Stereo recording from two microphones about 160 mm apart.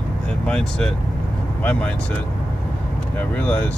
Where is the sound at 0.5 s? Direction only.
5° left (ahead or behind).